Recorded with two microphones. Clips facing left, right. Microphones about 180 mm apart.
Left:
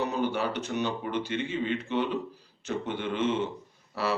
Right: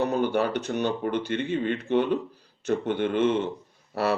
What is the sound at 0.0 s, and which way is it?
A man's voice, 55° right (ahead or behind).